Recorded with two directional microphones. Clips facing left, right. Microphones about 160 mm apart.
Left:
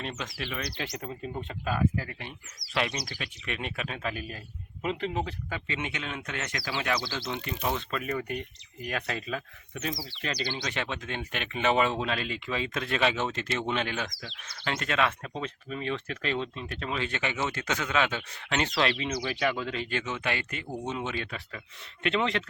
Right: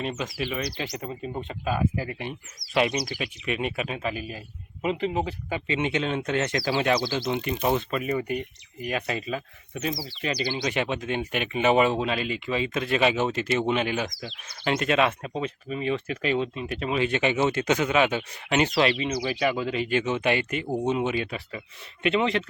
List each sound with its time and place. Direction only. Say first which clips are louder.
0.0 s speech: right 6 dB; 5° right (ahead or behind)
5.5 s speech: right 10 dB; 20° right (ahead or behind); by 22.4 s 5° right (ahead or behind)